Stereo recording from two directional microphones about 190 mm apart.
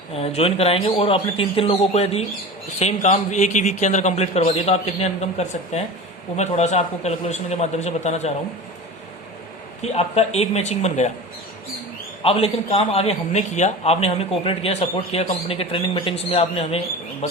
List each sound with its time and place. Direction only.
0.1 s a man's voice: 30° left (ahead or behind)
9.8 s a man's voice: 35° left (ahead or behind)
12.2 s a man's voice: 30° left (ahead or behind)